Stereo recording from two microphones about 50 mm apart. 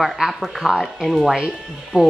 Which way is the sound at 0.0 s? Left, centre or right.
Centre.